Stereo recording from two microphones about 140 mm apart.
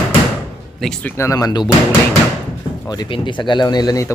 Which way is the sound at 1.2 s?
25° left (ahead or behind).